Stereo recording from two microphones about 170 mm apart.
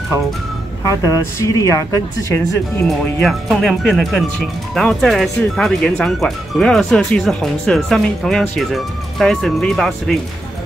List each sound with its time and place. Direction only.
0.8 s a woman's voice: 20° left (ahead or behind)
2.9 s speech: centre (ahead or behind)